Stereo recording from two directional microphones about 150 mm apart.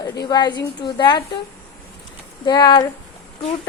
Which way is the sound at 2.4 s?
30° left (ahead or behind).